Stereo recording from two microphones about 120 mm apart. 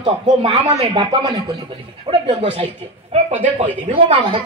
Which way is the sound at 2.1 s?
50° right (ahead or behind).